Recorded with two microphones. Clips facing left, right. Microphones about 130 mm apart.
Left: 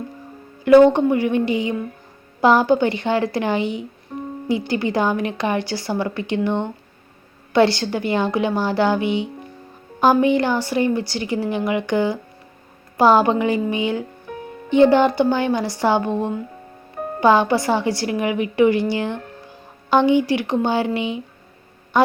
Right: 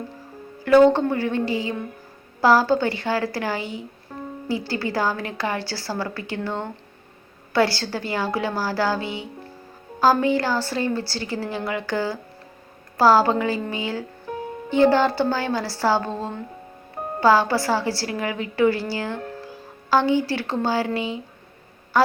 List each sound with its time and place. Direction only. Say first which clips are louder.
0.6 s a woman's voice: left 3 dB; 20° left (ahead or behind)